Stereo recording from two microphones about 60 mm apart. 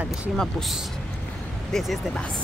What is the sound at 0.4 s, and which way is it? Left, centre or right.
Speech, centre.